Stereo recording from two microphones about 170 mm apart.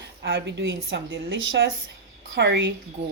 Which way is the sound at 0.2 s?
90° right.